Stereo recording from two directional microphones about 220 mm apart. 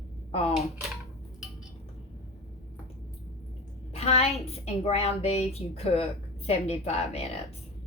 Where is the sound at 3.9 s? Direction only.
25° left (ahead or behind).